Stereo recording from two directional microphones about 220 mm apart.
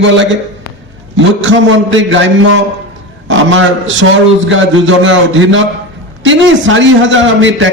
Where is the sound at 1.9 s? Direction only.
60° right (ahead or behind).